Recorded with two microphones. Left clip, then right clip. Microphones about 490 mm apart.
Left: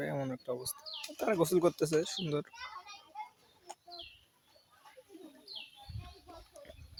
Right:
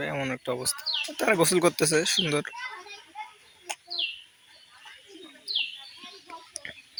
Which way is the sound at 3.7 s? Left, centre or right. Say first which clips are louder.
Right 13 dB; left.